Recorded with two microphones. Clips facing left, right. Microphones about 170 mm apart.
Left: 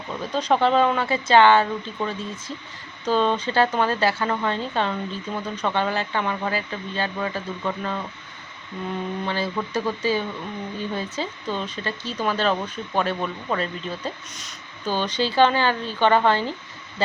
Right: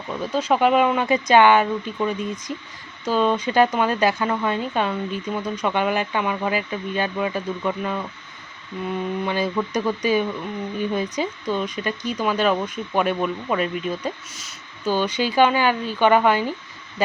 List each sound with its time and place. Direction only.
0.2 s speech: 10° right (ahead or behind)
9.2 s speech: 15° right (ahead or behind)